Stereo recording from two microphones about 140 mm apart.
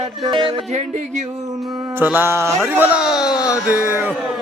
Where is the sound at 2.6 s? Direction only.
10° right (ahead or behind).